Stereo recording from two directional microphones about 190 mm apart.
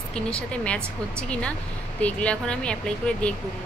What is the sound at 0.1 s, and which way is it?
Speech, 5° left (ahead or behind).